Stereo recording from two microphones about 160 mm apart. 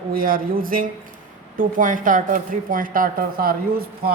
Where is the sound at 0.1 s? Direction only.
60° right (ahead or behind).